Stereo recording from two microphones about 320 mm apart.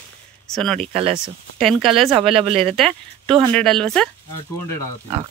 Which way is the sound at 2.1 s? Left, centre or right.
Centre.